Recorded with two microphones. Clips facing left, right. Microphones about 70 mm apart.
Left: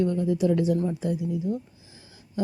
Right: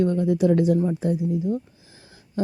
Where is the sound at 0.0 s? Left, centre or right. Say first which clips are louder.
Right 3 dB; right.